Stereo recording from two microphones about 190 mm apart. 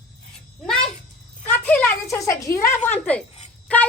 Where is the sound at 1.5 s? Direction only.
10° left (ahead or behind).